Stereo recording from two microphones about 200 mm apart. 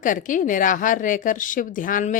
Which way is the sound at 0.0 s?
40° left (ahead or behind).